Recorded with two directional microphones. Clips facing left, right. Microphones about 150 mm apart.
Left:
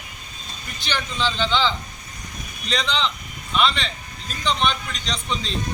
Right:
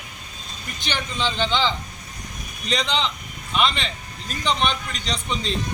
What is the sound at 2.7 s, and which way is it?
Speech, 15° right (ahead or behind).